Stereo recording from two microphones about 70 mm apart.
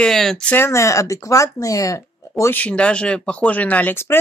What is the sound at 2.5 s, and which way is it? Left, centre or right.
Speech, left.